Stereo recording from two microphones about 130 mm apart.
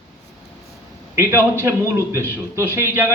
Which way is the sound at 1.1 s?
20° right (ahead or behind).